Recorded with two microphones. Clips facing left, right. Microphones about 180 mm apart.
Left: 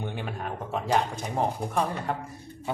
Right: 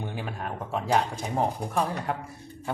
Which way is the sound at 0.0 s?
Centre (ahead or behind).